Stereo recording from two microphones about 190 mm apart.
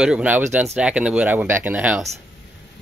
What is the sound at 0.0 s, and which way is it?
Speech, 5° right (ahead or behind).